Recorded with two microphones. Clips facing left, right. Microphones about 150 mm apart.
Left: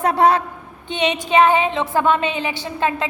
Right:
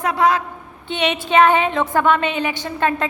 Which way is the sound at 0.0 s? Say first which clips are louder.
Left 2 dB; 30° left (ahead or behind).